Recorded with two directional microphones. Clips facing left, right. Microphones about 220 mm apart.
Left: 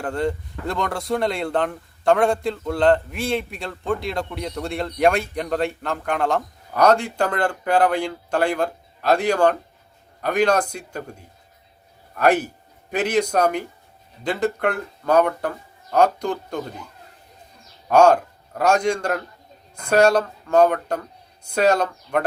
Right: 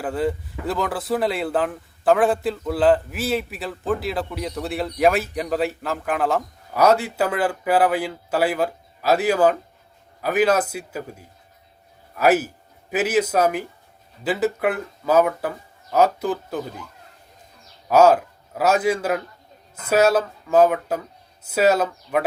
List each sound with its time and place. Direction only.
0.0 s speech: 5° right (ahead or behind)
12.1 s speech: 5° right (ahead or behind)
17.8 s a man's voice: 5° right (ahead or behind)